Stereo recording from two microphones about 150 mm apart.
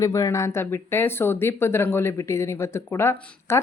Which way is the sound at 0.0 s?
25° left (ahead or behind).